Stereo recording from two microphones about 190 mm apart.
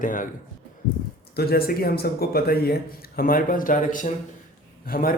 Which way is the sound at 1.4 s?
55° left (ahead or behind).